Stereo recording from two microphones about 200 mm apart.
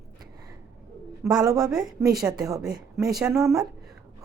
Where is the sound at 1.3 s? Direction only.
15° right (ahead or behind).